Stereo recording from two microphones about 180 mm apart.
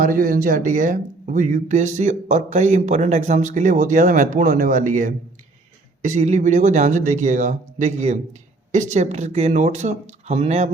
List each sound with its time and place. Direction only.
0.0 s speech: 50° right (ahead or behind)